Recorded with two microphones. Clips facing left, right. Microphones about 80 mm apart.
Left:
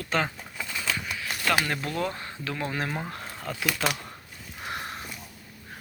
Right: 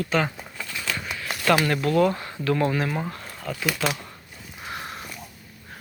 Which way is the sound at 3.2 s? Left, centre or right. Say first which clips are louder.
Right 2 dB; centre.